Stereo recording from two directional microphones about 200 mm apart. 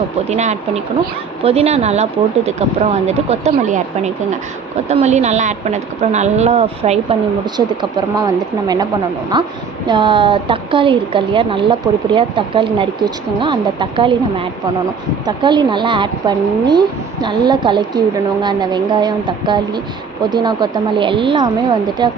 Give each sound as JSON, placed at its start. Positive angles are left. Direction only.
{"t": 0.3, "sound": "a woman's voice", "side_deg": -35}
{"t": 7.5, "sound": "a woman's voice", "side_deg": -20}